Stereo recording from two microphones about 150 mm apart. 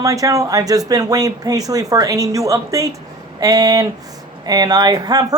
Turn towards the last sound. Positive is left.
turn(degrees=-25)  # may be behind; listen again after turning